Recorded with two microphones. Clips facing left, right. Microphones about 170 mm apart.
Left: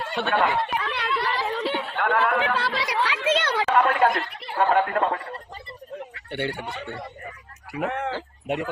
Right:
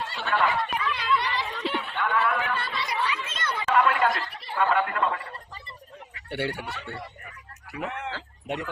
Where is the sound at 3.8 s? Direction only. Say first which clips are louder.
Left 2 dB; 45° left (ahead or behind).